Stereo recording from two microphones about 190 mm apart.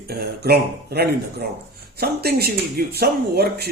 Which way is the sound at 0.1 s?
55° right (ahead or behind).